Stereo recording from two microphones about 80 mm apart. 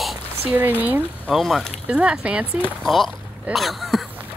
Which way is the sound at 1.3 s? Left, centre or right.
Centre.